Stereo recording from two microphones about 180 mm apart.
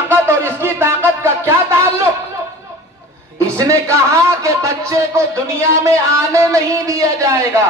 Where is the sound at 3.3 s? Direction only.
15° right (ahead or behind).